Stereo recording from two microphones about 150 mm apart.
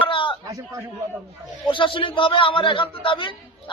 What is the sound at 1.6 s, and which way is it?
A man's voice, 35° left (ahead or behind).